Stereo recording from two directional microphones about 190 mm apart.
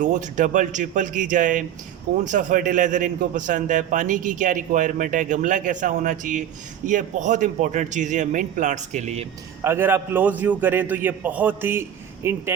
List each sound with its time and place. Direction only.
0.0 s a man's voice: 40° right (ahead or behind)
9.6 s a man's voice: 10° right (ahead or behind)